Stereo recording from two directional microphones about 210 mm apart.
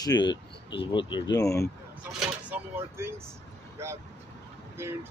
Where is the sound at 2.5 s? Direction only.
10° right (ahead or behind).